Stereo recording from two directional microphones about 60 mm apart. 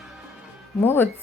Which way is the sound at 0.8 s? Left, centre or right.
Left.